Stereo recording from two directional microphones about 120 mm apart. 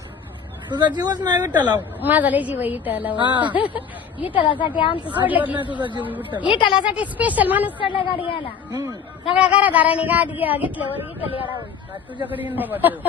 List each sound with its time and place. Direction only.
0.7 s speech: 35° right (ahead or behind)
1.5 s speech: 15° right (ahead or behind)
3.2 s speech: 40° right (ahead or behind)
3.5 s speech: 15° right (ahead or behind)
4.4 s a woman's voice: 40° left (ahead or behind)
5.2 s speech: 15° right (ahead or behind)
6.5 s a woman's voice: 40° left (ahead or behind)
6.8 s speech: 10° right (ahead or behind)
7.8 s a woman's voice: 45° left (ahead or behind)
8.7 s speech: 35° right (ahead or behind)
9.3 s speech: 10° right (ahead or behind)